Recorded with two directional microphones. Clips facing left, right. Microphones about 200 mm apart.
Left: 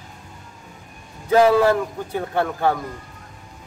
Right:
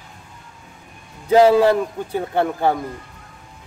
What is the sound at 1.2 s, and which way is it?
A man's voice, 20° right (ahead or behind).